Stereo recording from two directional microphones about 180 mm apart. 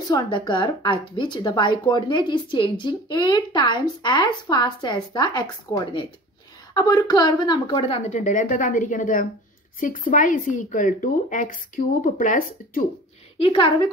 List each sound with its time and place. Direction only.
0.1 s a woman's voice: 25° left (ahead or behind); by 12.8 s 50° left (ahead or behind)